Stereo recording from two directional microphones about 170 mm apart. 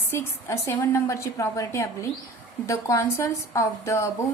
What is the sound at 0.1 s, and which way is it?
Speech, 15° left (ahead or behind).